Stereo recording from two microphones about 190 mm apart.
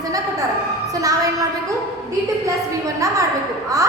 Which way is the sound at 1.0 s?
20° right (ahead or behind).